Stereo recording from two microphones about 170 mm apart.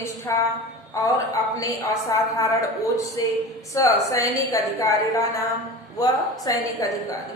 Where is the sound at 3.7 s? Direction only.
20° left (ahead or behind).